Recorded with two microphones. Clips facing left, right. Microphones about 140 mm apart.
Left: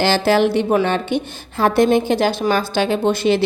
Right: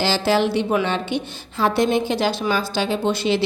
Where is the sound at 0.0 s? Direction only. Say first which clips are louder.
Left 4 dB; 55° left (ahead or behind).